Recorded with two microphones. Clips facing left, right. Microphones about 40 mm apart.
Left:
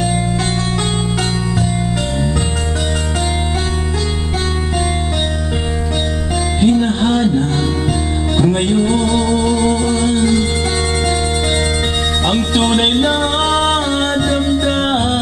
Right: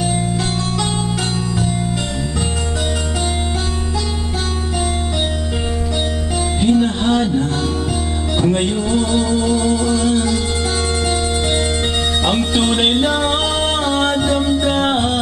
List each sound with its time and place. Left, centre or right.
6.6 s music: left
8.8 s music: left
12.8 s music: centre